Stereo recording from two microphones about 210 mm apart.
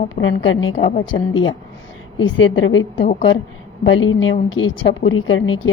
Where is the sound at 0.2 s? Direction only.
65° left (ahead or behind).